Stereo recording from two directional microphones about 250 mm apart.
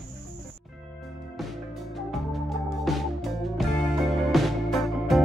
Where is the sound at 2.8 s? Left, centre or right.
Centre.